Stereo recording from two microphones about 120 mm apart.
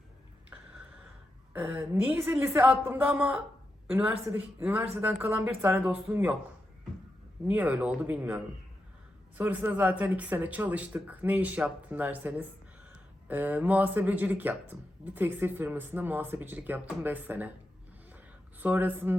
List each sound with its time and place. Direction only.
1.5 s speech: 15° right (ahead or behind)
7.4 s speech: 15° right (ahead or behind)
9.4 s speech: 15° right (ahead or behind)
18.6 s speech: 15° right (ahead or behind)